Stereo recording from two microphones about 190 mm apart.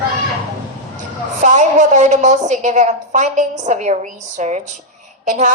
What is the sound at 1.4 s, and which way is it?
A woman's voice, 40° right (ahead or behind).